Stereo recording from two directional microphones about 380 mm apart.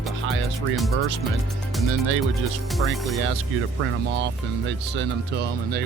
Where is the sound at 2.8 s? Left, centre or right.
Centre.